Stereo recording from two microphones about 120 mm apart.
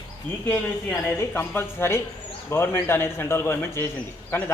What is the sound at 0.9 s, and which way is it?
A woman's voice, 15° left (ahead or behind).